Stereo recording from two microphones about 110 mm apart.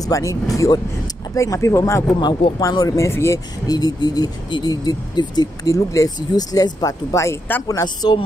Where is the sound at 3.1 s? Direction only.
25° left (ahead or behind).